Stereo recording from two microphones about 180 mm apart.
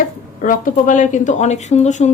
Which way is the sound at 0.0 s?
45° left (ahead or behind).